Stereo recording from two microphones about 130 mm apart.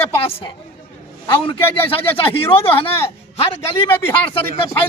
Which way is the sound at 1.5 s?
40° left (ahead or behind).